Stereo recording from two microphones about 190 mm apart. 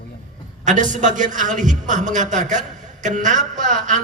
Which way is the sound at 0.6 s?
40° right (ahead or behind).